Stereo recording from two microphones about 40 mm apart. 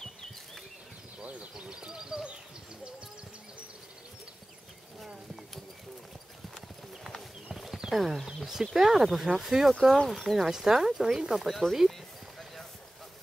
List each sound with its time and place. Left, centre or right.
1.7 s bird: centre
7.5 s horse: centre
7.9 s speech: centre
10.0 s speech: centre
10.3 s speech: centre
11.4 s speech: centre
11.9 s a sound: centre